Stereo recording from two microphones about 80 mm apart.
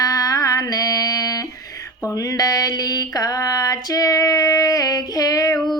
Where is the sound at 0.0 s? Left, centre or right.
Left.